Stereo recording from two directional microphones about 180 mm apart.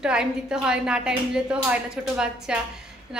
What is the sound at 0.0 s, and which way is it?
A woman's voice, 5° right (ahead or behind).